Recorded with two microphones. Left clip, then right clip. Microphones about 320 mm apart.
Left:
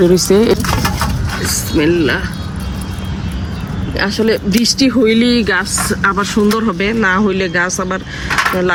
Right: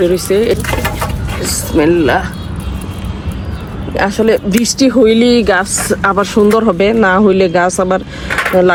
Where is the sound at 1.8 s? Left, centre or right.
Centre.